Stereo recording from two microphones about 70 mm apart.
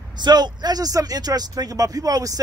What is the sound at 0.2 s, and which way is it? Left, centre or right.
Speech, right.